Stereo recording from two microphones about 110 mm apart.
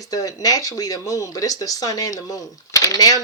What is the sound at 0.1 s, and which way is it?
Speech, 35° left (ahead or behind).